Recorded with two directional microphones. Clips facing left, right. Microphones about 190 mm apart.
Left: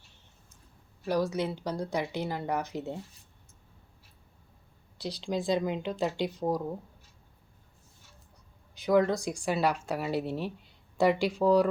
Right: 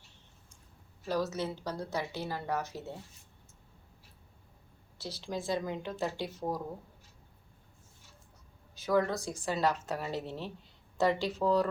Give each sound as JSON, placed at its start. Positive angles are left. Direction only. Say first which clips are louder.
{"t": 1.0, "sound": "speech", "louder": "left 4 dB", "side_deg": 15}
{"t": 4.9, "sound": "speech", "louder": "left 6 dB", "side_deg": 15}
{"t": 8.7, "sound": "speech", "louder": "left 5 dB", "side_deg": 15}